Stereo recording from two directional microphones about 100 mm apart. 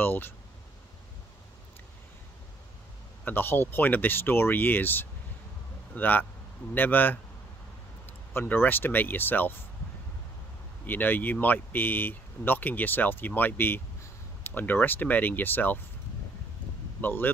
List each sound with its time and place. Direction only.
0.0 s speech: 20° left (ahead or behind)
3.3 s speech: 20° left (ahead or behind)
8.3 s speech: 20° left (ahead or behind)
10.9 s speech: 20° left (ahead or behind)
17.0 s speech: 20° left (ahead or behind)